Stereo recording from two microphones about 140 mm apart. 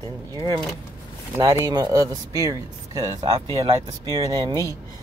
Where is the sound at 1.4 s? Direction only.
30° right (ahead or behind).